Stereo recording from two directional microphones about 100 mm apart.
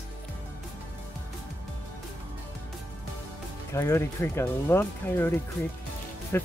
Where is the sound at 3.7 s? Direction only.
30° left (ahead or behind).